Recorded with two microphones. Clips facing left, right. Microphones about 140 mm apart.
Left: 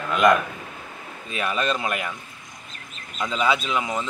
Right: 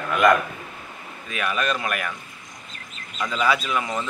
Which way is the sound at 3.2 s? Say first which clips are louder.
Even; 20° left (ahead or behind).